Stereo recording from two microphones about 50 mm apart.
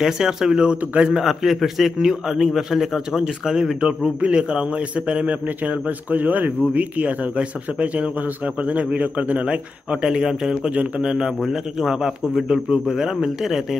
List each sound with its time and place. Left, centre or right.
0.0 s a man's voice: centre
1.2 s a man's voice: centre
4.2 s a man's voice: right
10.0 s a man's voice: centre
10.7 s a man's voice: right
11.1 s a man's voice: centre